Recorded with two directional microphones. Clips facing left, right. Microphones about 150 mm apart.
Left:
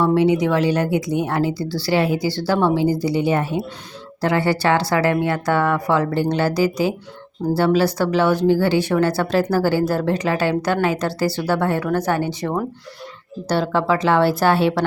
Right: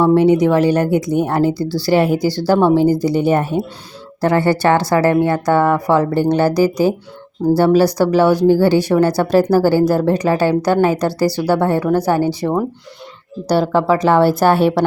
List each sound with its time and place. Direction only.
0.1 s speech: 45° right (ahead or behind)
13.6 s speech: 40° right (ahead or behind)